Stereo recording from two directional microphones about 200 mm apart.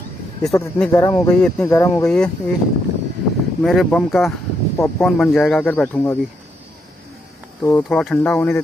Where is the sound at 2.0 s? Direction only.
5° left (ahead or behind).